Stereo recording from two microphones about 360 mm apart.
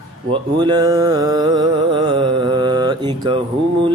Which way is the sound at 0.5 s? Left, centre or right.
Centre.